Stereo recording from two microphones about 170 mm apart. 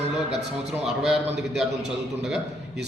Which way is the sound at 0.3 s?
40° right (ahead or behind).